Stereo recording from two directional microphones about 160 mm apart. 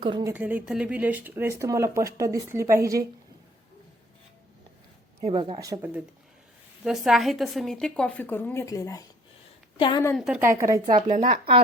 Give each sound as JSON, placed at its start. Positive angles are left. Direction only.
{"t": 0.0, "sound": "speech", "side_deg": -30}
{"t": 0.3, "sound": "speech", "side_deg": -10}
{"t": 5.2, "sound": "speech", "side_deg": -35}
{"t": 5.5, "sound": "speech", "side_deg": -20}
{"t": 6.8, "sound": "a woman's voice", "side_deg": 0}
{"t": 9.7, "sound": "a woman's voice", "side_deg": 30}
{"t": 10.2, "sound": "a woman's voice", "side_deg": 0}
{"t": 10.4, "sound": "speech", "side_deg": -20}
{"t": 11.3, "sound": "speech", "side_deg": -35}